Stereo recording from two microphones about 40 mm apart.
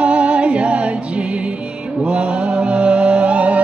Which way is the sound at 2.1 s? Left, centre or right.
Right.